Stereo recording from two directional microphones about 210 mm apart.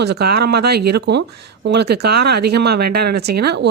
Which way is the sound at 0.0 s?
50° right (ahead or behind).